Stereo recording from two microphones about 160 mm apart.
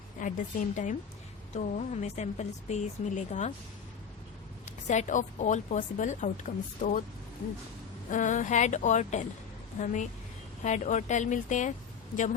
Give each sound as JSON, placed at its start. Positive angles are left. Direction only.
{"t": 0.2, "sound": "a woman's voice", "side_deg": 55}
{"t": 4.9, "sound": "a woman's voice", "side_deg": 50}
{"t": 8.1, "sound": "a woman's voice", "side_deg": 55}